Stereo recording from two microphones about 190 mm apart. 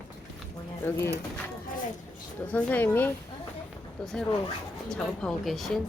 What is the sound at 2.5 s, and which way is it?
Speech, 10° left (ahead or behind).